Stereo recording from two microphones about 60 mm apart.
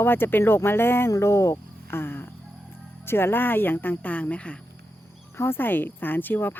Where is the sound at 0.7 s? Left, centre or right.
Left.